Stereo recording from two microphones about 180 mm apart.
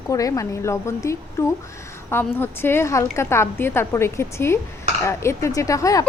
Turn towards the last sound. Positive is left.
turn(degrees=20)  # may be behind; listen again after turning